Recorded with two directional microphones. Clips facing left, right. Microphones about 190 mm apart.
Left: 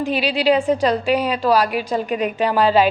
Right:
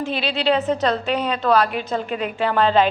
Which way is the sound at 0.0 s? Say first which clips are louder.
Left 3 dB; 10° left (ahead or behind).